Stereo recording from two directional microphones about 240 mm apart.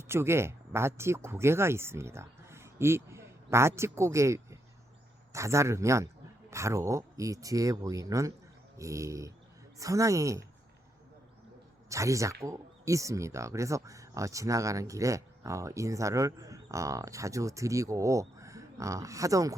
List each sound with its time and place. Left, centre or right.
0.1 s speech: centre
11.9 s speech: centre